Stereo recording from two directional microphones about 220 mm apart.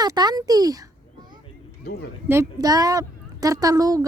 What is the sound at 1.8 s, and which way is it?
Speech, 45° left (ahead or behind).